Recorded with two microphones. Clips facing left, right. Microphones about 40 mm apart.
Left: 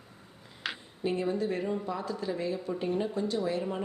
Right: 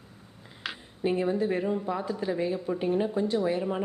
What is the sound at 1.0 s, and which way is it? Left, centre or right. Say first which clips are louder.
A woman's voice: right 4 dB; right.